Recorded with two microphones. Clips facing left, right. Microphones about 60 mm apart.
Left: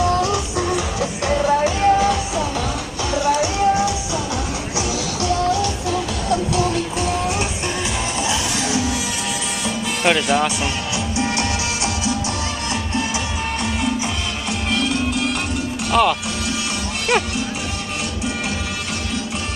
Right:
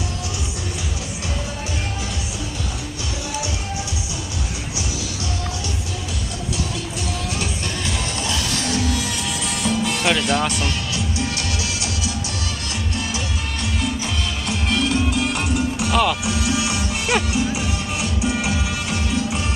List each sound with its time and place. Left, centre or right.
0.1 s music: left
1.4 s music: left
8.2 s music: centre
14.7 s music: centre
15.9 s speech: centre
16.3 s music: centre
17.1 s speech: centre